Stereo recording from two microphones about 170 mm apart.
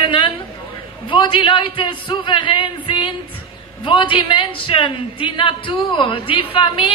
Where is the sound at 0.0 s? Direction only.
30° left (ahead or behind).